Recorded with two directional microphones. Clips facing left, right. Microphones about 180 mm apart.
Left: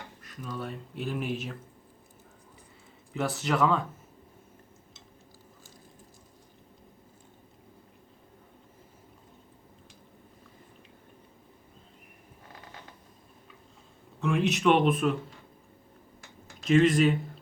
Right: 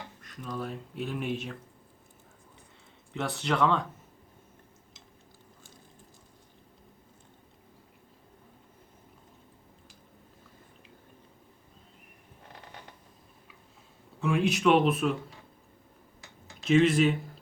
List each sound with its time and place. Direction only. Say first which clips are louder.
0.2 s speech: right 1 dB; centre (ahead or behind)
3.1 s speech: left 1 dB; centre (ahead or behind)
14.2 s speech: even; centre (ahead or behind)
16.6 s speech: left 1 dB; centre (ahead or behind)